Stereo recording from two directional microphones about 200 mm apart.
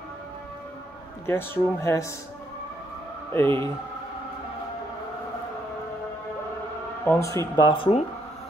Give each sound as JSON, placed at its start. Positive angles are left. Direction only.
{"t": 1.2, "sound": "speech", "side_deg": 10}
{"t": 3.3, "sound": "speech", "side_deg": 15}
{"t": 7.1, "sound": "speech", "side_deg": 15}